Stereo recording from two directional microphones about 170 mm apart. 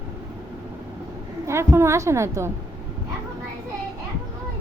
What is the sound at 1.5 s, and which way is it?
A woman's voice, 15° right (ahead or behind).